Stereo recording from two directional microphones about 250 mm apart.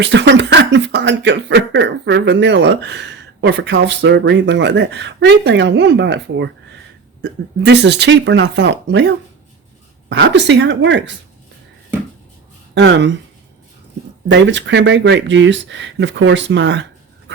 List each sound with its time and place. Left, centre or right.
0.0 s speech: right
12.7 s speech: right
14.3 s speech: right